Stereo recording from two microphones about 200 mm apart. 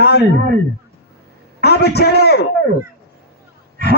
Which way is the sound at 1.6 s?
55° left (ahead or behind).